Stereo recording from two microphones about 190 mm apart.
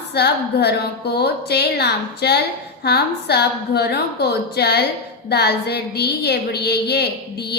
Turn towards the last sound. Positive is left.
turn(degrees=60)  # may be behind; listen again after turning